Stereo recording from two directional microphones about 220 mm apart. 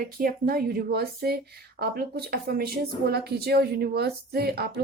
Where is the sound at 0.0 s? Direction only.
40° right (ahead or behind).